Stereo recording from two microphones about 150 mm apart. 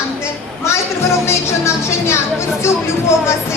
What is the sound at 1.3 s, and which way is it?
Speech, 20° left (ahead or behind).